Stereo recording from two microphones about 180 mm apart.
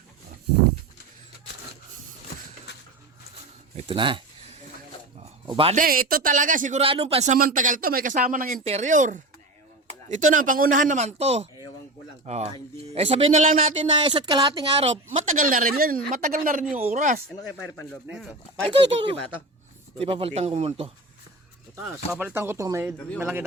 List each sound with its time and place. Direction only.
3.8 s speech: 30° right (ahead or behind)
5.2 s a sound: 30° right (ahead or behind)
5.7 s speech: 50° right (ahead or behind); by 7.3 s 35° right (ahead or behind)
7.3 s speech: 45° right (ahead or behind)
13.7 s speech: 25° right (ahead or behind); by 17.2 s 45° right (ahead or behind)
18.1 s speech: 5° right (ahead or behind)
18.7 s speech: 30° right (ahead or behind)
22.1 s speech: 10° right (ahead or behind)